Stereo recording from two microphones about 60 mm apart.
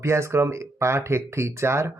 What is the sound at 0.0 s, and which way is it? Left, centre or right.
Speech, right.